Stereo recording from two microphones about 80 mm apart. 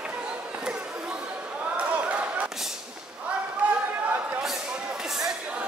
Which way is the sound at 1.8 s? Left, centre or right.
Centre.